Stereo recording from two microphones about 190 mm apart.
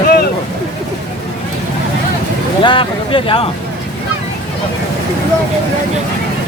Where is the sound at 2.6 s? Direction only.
25° left (ahead or behind).